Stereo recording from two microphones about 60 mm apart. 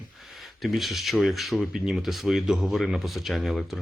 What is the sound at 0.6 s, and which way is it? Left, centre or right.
Speech, centre.